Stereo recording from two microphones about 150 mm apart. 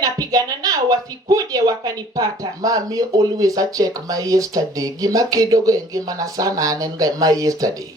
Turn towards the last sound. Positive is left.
turn(degrees=-25)  # may be behind; listen again after turning